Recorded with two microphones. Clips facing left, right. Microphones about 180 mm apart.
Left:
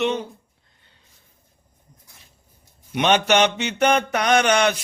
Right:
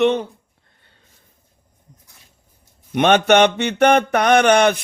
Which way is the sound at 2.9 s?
55° right (ahead or behind).